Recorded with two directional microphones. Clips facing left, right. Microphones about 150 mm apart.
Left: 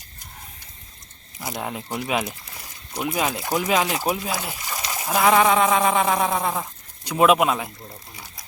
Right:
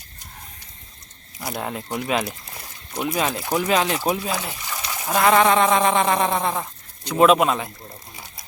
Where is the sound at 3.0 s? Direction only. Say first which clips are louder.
Right 1 dB; 10° left (ahead or behind).